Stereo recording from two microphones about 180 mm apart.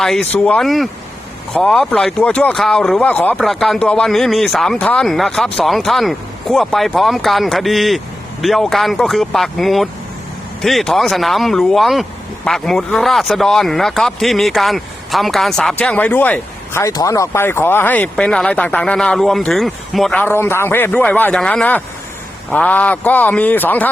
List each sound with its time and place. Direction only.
0.0 s a man's voice: centre (ahead or behind)